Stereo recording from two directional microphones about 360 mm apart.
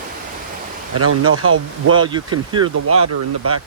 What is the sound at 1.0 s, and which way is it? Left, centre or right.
Speech, right.